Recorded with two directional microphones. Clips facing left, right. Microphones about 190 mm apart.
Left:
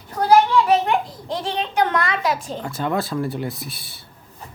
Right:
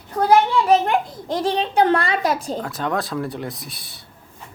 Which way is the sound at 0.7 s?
45° right (ahead or behind).